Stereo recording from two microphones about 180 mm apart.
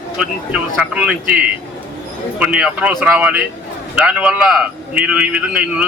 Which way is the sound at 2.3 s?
5° right (ahead or behind).